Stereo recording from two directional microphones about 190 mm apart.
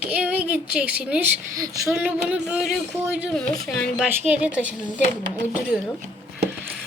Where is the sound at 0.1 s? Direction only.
5° right (ahead or behind).